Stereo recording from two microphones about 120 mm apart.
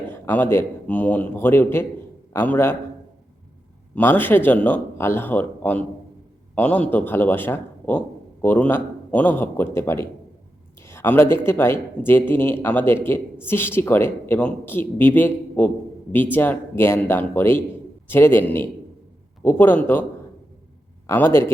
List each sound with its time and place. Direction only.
0.1 s speech: 15° left (ahead or behind)
3.9 s speech: 15° left (ahead or behind)
21.1 s speech: 20° left (ahead or behind)